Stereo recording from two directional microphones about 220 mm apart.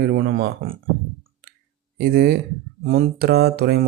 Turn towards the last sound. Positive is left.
turn(degrees=-45)  # may be behind; listen again after turning